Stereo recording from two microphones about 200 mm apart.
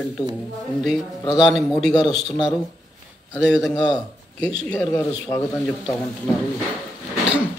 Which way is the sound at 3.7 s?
20° left (ahead or behind).